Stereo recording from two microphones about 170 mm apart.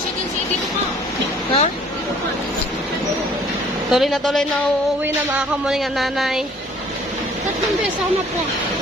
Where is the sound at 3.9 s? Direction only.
Centre (ahead or behind).